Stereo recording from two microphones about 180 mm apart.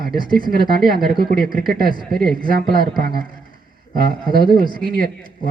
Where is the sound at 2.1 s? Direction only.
Centre (ahead or behind).